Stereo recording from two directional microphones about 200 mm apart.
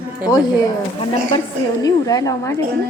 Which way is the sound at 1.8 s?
20° left (ahead or behind).